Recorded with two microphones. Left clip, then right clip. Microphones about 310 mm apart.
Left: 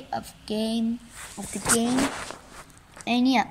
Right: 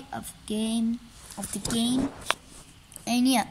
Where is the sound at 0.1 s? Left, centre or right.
Centre.